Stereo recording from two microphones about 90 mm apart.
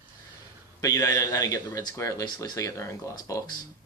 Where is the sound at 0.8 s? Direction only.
35° left (ahead or behind).